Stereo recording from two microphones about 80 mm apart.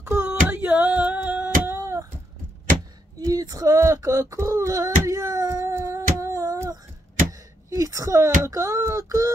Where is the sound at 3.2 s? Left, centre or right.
Right.